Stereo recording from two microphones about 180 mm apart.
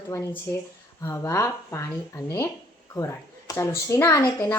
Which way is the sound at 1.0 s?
15° left (ahead or behind).